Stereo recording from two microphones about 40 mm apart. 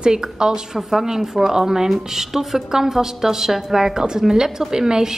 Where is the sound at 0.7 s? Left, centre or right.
Centre.